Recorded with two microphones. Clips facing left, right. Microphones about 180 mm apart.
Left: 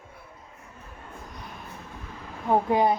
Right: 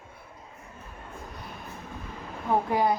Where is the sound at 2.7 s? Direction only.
20° left (ahead or behind).